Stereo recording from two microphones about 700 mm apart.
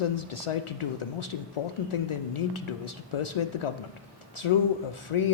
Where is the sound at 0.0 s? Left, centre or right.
Left.